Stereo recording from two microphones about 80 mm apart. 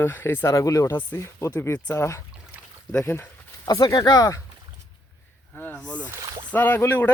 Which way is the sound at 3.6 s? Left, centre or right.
Left.